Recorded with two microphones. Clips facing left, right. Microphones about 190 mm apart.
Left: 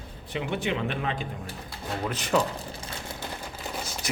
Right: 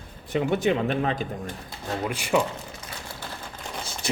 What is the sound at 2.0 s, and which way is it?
Speech, 10° right (ahead or behind).